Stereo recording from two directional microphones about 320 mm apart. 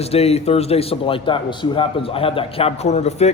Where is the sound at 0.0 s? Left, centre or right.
Centre.